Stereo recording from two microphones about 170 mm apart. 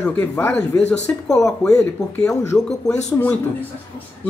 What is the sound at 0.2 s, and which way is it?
A man's voice, 10° left (ahead or behind).